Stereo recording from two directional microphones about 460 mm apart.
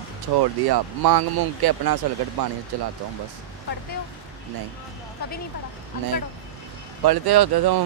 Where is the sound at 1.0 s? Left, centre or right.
Right.